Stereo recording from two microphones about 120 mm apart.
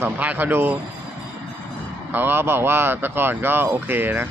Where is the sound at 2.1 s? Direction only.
15° right (ahead or behind).